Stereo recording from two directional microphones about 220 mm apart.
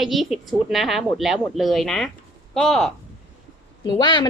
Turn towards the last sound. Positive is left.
turn(degrees=20)  # may be behind; listen again after turning